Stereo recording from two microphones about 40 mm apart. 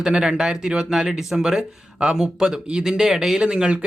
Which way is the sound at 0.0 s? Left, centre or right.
Centre.